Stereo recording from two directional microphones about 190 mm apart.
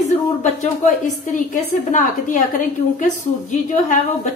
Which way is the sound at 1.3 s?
40° left (ahead or behind).